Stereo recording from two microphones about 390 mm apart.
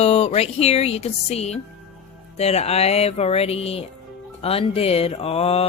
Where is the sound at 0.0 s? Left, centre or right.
Centre.